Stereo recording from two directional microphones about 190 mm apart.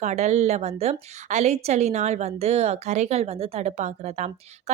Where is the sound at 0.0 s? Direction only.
35° right (ahead or behind).